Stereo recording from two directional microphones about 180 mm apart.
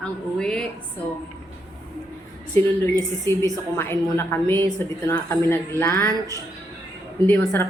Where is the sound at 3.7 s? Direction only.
15° left (ahead or behind).